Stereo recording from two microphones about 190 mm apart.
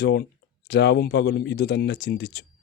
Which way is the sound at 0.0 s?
60° left (ahead or behind).